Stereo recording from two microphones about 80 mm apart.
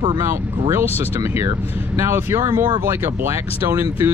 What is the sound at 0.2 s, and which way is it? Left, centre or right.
Speech, right.